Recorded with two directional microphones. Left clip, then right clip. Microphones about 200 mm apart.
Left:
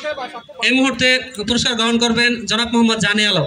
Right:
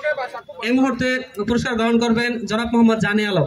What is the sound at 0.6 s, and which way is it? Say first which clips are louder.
A man's voice: left 5 dB; 50° right (ahead or behind).